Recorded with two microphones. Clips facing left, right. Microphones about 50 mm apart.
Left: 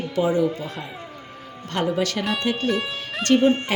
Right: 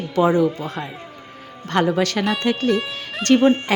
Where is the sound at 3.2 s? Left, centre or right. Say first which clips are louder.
Right 3 dB; right.